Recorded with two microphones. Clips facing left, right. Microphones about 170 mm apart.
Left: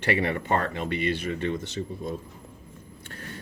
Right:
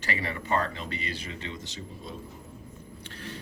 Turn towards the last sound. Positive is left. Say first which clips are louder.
# even
turn(degrees=50)  # may be behind; listen again after turning